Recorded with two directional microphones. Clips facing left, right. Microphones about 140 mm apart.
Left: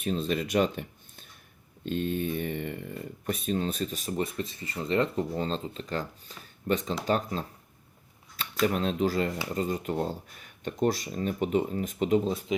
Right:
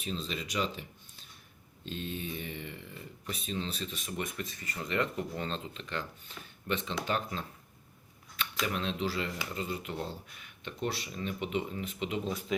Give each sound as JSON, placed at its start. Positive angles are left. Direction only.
{"t": 0.0, "sound": "speech", "side_deg": 50}
{"t": 8.6, "sound": "speech", "side_deg": 45}
{"t": 12.5, "sound": "speech", "side_deg": 20}